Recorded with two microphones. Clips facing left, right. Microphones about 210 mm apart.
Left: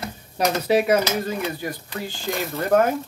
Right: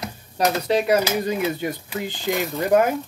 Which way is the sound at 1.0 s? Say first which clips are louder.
Right 2 dB; 15° right (ahead or behind).